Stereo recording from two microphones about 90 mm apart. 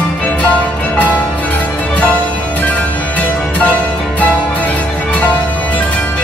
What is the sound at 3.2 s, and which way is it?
Music, 15° left (ahead or behind).